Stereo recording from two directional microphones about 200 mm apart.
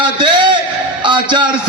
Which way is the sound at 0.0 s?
20° right (ahead or behind).